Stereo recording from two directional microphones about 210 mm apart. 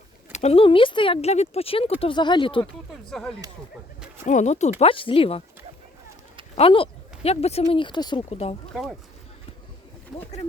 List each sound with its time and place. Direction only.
0.3 s speech: 30° left (ahead or behind)
3.1 s speech: centre (ahead or behind)
4.3 s speech: 35° left (ahead or behind)
6.6 s speech: 25° left (ahead or behind)
8.7 s speech: centre (ahead or behind)